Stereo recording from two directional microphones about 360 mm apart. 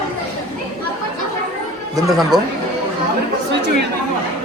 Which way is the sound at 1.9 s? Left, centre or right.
Centre.